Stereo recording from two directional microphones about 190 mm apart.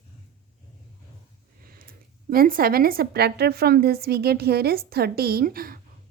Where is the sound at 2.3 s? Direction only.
50° right (ahead or behind).